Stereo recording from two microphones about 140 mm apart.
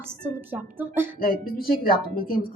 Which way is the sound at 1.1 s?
90° left.